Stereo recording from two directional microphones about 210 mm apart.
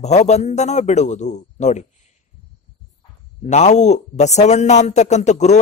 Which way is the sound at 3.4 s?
35° left (ahead or behind).